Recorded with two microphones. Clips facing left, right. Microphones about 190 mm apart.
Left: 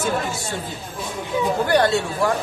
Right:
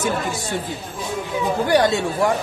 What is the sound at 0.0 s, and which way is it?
Speech, 15° right (ahead or behind).